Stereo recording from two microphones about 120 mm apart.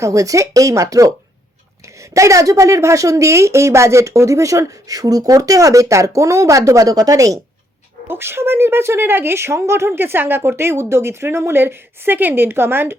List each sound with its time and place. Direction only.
0.0 s speech: 25° right (ahead or behind)
2.1 s speech: 25° right (ahead or behind)